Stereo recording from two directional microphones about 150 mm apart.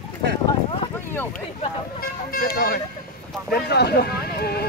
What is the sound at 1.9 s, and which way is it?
Speech, 90° left.